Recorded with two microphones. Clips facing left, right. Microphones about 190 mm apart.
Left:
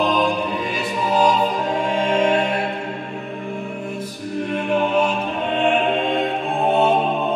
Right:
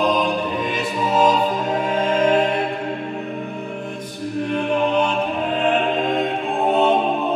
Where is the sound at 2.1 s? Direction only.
Centre (ahead or behind).